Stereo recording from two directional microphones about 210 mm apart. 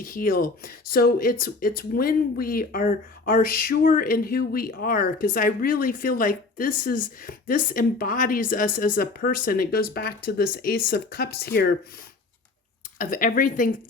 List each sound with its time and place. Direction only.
0.0 s speech: 40° left (ahead or behind)
13.0 s a woman's voice: 40° left (ahead or behind)